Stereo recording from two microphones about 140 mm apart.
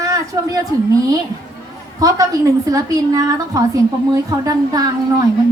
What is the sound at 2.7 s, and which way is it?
A woman's voice, 25° right (ahead or behind).